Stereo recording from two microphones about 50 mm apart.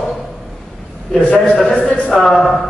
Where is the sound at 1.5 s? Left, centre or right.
Centre.